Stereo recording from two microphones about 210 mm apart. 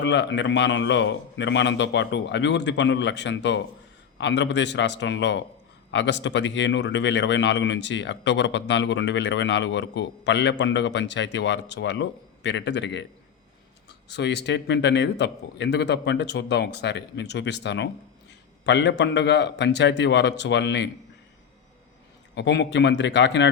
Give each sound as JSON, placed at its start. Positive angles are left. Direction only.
{"t": 0.0, "sound": "speech", "side_deg": 60}
{"t": 14.1, "sound": "speech", "side_deg": 55}
{"t": 22.4, "sound": "speech", "side_deg": 55}